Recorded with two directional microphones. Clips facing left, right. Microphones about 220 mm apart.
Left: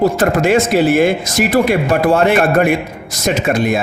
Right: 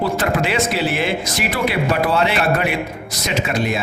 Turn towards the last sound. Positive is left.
turn(degrees=50)  # may be behind; listen again after turning